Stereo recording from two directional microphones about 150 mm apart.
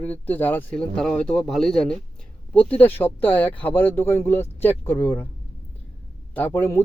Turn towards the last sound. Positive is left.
turn(degrees=15)  # may be behind; listen again after turning